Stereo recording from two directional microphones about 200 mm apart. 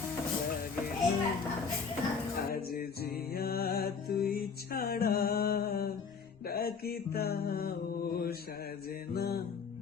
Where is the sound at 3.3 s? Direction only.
50° left (ahead or behind).